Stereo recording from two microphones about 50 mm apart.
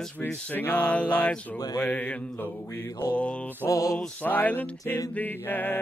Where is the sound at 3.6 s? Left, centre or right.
Left.